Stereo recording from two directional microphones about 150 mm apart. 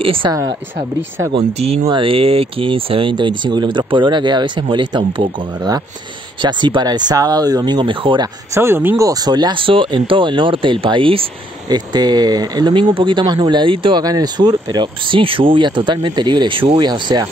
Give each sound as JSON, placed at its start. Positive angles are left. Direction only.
{"t": 0.0, "sound": "speech", "side_deg": -35}
{"t": 1.3, "sound": "speech", "side_deg": -40}
{"t": 8.5, "sound": "speech", "side_deg": -15}